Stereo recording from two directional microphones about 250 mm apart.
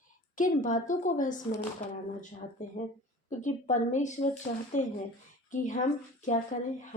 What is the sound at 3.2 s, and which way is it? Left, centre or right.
A woman's voice, left.